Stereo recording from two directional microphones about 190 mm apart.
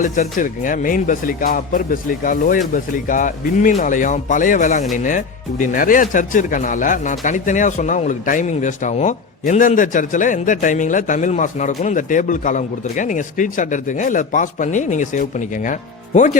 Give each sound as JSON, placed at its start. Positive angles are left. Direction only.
{"t": 0.0, "sound": "a man's voice", "side_deg": 40}